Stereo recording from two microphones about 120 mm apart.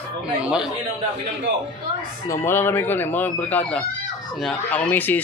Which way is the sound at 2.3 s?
20° left (ahead or behind).